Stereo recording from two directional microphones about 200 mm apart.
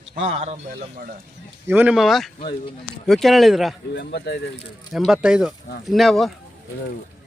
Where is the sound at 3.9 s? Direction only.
55° left (ahead or behind).